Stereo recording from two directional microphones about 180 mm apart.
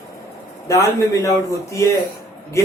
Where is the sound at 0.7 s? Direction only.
15° left (ahead or behind).